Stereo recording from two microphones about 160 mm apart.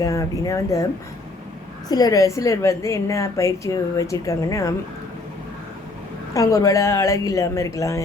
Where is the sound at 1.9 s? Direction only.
25° left (ahead or behind).